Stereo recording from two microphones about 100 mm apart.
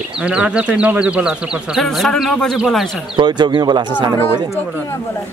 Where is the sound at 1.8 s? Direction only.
5° left (ahead or behind).